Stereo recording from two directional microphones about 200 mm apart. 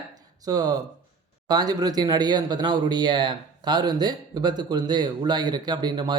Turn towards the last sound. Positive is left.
turn(degrees=-20)  # may be behind; listen again after turning